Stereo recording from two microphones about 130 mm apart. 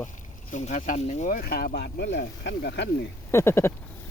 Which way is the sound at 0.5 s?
70° left (ahead or behind).